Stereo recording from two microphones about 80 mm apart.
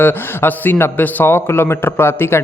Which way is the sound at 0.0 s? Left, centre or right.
Left.